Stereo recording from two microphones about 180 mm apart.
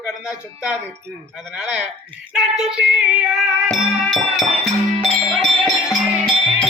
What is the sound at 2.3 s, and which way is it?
Speech, 5° right (ahead or behind).